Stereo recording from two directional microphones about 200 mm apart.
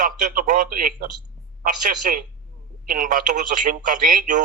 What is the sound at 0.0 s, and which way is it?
Speech, 40° right (ahead or behind).